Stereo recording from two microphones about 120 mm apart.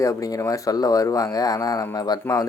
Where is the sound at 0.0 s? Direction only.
25° left (ahead or behind).